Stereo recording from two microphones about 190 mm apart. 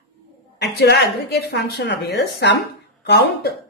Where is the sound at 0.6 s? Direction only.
60° left (ahead or behind).